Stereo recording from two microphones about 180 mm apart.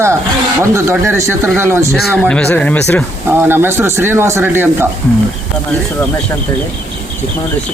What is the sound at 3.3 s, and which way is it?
Speech, 10° right (ahead or behind).